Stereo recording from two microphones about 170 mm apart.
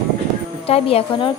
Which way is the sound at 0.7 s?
35° left (ahead or behind).